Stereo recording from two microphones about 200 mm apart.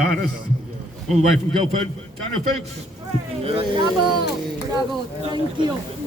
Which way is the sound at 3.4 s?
30° right (ahead or behind).